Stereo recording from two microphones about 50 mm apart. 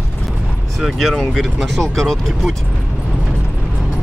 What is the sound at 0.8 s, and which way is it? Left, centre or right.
Speech, centre.